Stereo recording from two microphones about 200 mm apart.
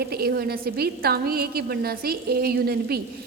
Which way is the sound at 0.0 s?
50° right (ahead or behind).